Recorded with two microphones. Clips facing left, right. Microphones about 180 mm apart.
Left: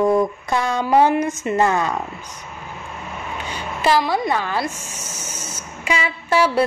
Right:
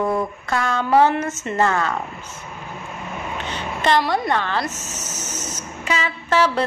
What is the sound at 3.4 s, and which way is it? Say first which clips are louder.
Speech: left 1 dB; 10° left (ahead or behind).